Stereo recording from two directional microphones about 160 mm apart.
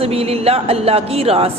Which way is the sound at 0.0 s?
40° right (ahead or behind).